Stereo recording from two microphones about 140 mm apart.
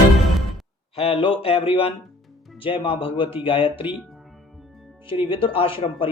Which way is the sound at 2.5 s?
40° left (ahead or behind).